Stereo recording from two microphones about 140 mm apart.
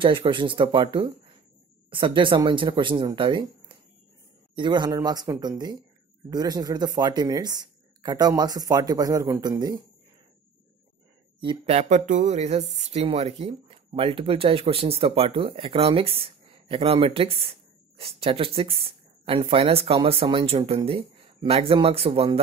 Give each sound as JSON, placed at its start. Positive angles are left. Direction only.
{"t": 0.0, "sound": "speech", "side_deg": -35}
{"t": 11.4, "sound": "speech", "side_deg": -50}